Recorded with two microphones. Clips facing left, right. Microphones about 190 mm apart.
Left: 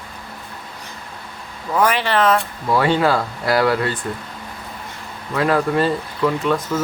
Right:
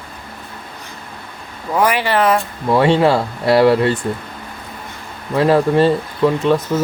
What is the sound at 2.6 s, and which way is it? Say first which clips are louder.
Speech: right 4 dB; 25° right (ahead or behind).